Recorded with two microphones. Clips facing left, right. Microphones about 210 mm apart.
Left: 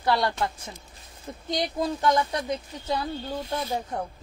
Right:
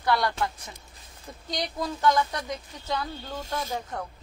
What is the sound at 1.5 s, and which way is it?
Speech, 25° left (ahead or behind).